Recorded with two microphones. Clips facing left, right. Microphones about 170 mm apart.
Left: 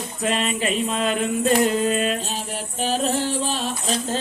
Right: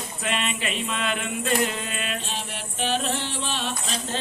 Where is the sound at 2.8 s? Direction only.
40° left (ahead or behind).